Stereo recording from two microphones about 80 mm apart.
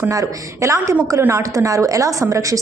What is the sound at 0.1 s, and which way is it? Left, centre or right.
A woman's voice, right.